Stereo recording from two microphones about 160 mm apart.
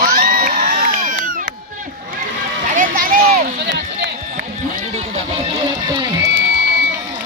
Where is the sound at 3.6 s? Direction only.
90° right.